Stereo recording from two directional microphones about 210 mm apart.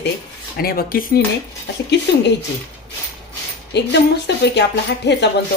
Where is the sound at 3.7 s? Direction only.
55° left (ahead or behind).